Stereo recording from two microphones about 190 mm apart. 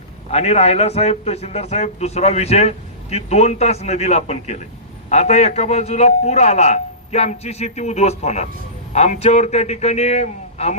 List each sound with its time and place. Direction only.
0.3 s a man's voice: 35° left (ahead or behind)